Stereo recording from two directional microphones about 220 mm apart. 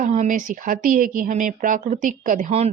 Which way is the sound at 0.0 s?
35° right (ahead or behind).